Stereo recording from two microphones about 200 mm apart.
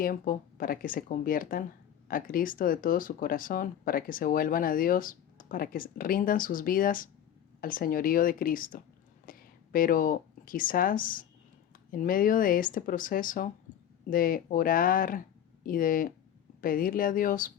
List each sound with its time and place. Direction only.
0.0 s speech: 45° left (ahead or behind)